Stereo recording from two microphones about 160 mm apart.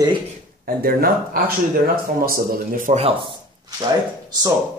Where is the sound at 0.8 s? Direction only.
70° right (ahead or behind).